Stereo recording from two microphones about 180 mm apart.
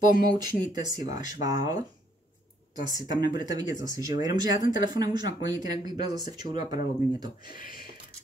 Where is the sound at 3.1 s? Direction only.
25° right (ahead or behind).